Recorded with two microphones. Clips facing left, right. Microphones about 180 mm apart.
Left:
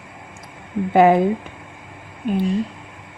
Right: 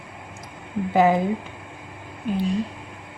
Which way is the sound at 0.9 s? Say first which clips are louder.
Left 5 dB; 65° left (ahead or behind).